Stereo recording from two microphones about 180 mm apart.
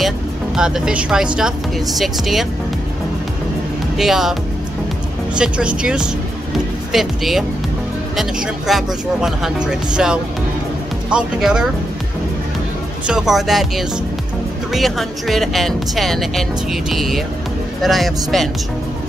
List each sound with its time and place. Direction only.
0.6 s speech: 5° right (ahead or behind)
4.0 s speech: centre (ahead or behind)
13.0 s speech: 5° right (ahead or behind)